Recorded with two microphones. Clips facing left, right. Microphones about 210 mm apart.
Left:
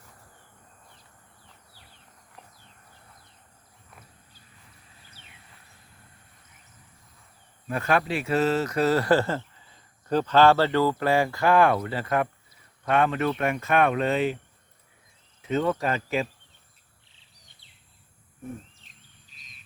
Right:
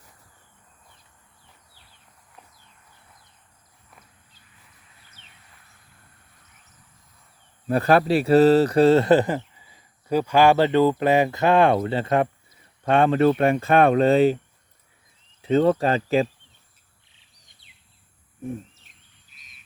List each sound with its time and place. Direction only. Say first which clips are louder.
7.7 s a man's voice: right 7 dB; 35° right (ahead or behind)
15.4 s speech: right 7 dB; 30° right (ahead or behind)